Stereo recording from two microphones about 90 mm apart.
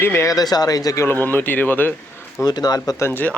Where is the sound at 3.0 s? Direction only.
30° left (ahead or behind).